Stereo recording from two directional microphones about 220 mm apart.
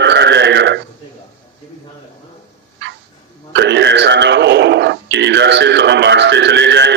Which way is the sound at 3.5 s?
50° right (ahead or behind).